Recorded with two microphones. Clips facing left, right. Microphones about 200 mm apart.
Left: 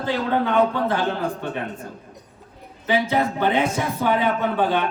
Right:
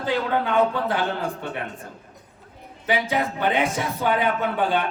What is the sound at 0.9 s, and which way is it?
Speech, 15° right (ahead or behind).